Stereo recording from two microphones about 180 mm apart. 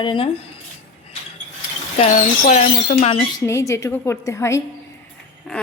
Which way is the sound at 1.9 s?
45° left (ahead or behind).